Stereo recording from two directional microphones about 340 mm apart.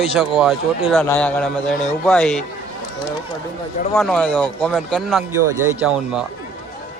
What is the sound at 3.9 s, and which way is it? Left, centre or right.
A man's voice, centre.